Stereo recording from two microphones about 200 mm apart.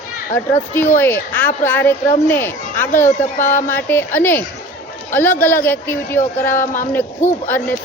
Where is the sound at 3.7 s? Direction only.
10° left (ahead or behind).